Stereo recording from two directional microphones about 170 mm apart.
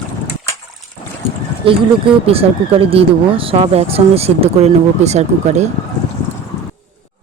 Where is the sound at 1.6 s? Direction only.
35° right (ahead or behind).